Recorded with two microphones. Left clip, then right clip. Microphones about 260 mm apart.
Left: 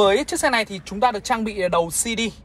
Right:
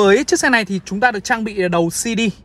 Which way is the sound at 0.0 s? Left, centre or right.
Right.